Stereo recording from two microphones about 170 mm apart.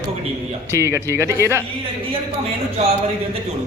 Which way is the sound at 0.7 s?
15° right (ahead or behind).